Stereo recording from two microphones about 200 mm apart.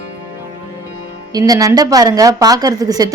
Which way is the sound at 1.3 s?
20° right (ahead or behind).